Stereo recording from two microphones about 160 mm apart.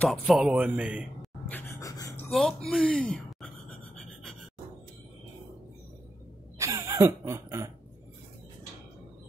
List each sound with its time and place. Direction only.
0.0 s speech: centre (ahead or behind)
1.5 s gasp: 20° left (ahead or behind)
2.2 s a sound: centre (ahead or behind)
6.6 s speech: 20° right (ahead or behind)